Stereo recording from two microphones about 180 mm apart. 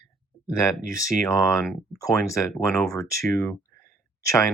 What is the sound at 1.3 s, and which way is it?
Speech, 15° left (ahead or behind).